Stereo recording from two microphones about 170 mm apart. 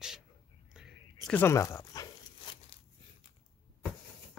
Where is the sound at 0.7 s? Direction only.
Centre (ahead or behind).